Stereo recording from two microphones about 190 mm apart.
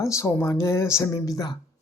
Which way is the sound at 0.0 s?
15° left (ahead or behind).